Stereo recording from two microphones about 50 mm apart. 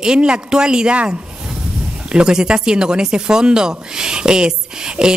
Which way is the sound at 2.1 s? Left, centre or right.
Centre.